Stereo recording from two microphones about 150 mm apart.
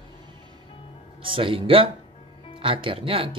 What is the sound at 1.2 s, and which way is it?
A man's voice, 35° right (ahead or behind).